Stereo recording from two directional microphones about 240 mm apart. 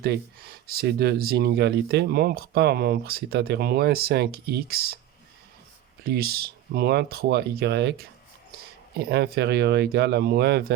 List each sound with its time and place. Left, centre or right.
0.0 s speech: right
6.0 s speech: right